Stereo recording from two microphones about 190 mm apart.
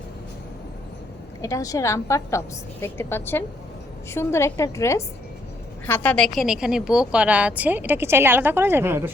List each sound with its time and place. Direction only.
1.4 s a woman's voice: 15° left (ahead or behind); by 9.1 s 10° right (ahead or behind)